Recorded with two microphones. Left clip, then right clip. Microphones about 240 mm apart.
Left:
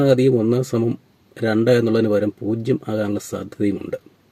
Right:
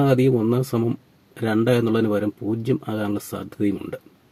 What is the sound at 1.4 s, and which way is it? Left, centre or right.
Speech, centre.